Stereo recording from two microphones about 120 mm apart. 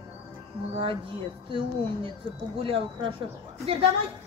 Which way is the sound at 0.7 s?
50° right (ahead or behind).